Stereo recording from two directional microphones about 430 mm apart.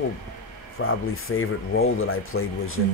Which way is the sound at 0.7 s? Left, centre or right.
Left.